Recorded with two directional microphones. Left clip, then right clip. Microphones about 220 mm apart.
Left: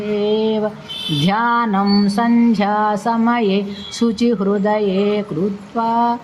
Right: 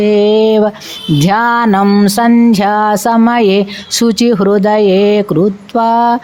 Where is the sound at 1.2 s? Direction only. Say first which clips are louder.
Right 6 dB; 50° right (ahead or behind).